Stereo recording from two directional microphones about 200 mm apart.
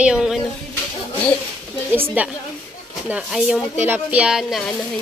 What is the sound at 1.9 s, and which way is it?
A woman's voice, 10° right (ahead or behind).